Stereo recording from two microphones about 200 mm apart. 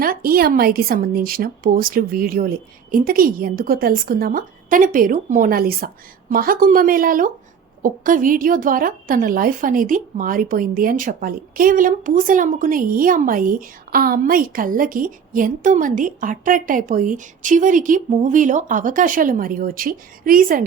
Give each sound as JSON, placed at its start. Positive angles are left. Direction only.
{"t": 0.0, "sound": "a woman's voice", "side_deg": -45}